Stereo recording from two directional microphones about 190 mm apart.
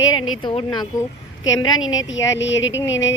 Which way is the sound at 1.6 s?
90° left.